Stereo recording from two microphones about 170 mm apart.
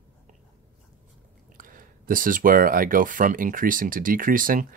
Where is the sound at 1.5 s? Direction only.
55° right (ahead or behind).